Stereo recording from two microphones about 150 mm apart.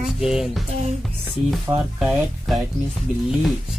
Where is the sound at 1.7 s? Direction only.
20° right (ahead or behind).